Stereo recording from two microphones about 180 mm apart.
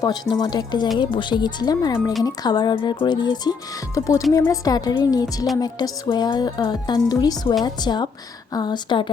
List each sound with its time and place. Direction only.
0.0 s music: 20° left (ahead or behind)
3.9 s speech: 15° left (ahead or behind)
4.3 s music: 20° left (ahead or behind)